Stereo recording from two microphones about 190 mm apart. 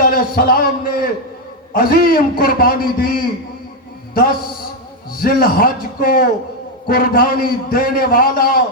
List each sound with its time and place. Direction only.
0.0 s a man's voice: 50° left (ahead or behind)
5.1 s a man's voice: 50° left (ahead or behind)